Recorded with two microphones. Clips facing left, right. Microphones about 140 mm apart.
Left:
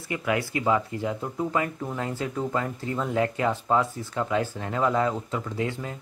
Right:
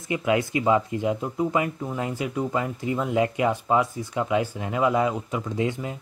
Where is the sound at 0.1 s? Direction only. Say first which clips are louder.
Right 4 dB; 20° right (ahead or behind).